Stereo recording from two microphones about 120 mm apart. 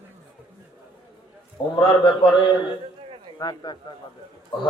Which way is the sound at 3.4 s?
40° left (ahead or behind).